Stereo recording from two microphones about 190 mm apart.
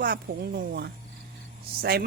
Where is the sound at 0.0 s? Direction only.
55° right (ahead or behind).